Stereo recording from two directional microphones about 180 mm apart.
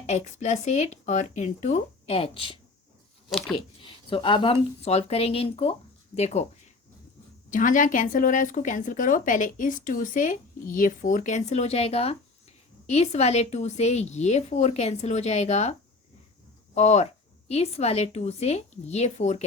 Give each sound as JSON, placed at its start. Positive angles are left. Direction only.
{"t": 0.0, "sound": "a woman's voice", "side_deg": 40}
{"t": 3.2, "sound": "speech", "side_deg": 0}
{"t": 3.8, "sound": "a woman's voice", "side_deg": 30}
{"t": 7.5, "sound": "a woman's voice", "side_deg": 45}
{"t": 16.7, "sound": "a woman's voice", "side_deg": 40}